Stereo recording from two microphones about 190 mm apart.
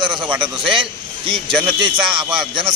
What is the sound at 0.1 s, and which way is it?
Speech, 5° right (ahead or behind).